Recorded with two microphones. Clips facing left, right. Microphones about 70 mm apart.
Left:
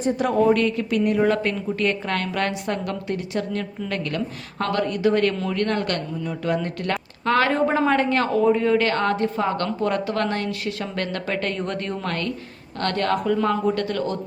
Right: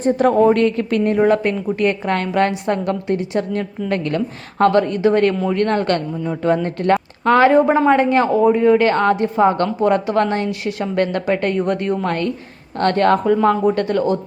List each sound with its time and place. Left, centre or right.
0.0 s a woman's voice: right
1.2 s a woman's voice: right